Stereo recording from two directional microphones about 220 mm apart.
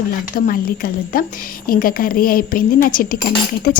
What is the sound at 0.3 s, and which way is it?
A woman's voice, 40° left (ahead or behind).